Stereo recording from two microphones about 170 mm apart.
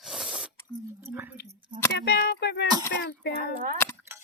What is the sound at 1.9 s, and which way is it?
Speech, 80° left.